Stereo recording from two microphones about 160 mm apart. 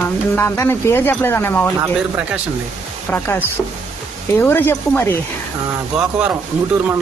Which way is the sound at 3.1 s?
15° left (ahead or behind).